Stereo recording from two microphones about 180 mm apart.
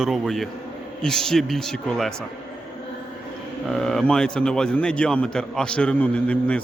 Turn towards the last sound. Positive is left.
turn(degrees=5)  # may be behind; listen again after turning